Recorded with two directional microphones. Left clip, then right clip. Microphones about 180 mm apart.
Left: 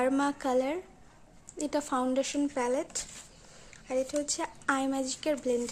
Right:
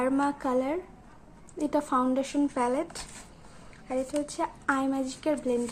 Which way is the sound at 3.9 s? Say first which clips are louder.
Even; 25° left (ahead or behind).